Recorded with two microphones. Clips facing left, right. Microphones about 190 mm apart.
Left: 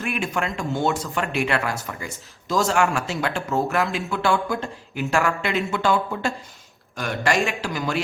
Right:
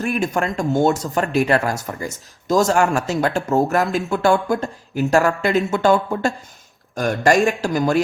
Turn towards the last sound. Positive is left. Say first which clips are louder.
# right 8 dB
turn(degrees=-45)  # may be behind; listen again after turning